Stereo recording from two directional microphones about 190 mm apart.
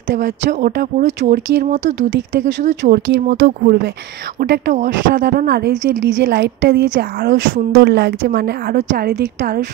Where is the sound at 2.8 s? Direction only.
65° right (ahead or behind).